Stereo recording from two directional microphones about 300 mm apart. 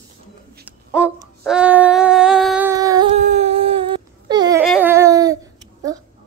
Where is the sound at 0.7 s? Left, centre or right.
Centre.